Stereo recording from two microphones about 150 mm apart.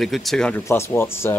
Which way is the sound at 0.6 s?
15° left (ahead or behind).